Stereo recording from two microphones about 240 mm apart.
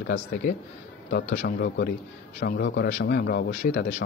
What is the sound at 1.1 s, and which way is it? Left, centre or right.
A man's voice, left.